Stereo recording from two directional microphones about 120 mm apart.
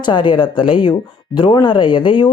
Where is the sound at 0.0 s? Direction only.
40° left (ahead or behind).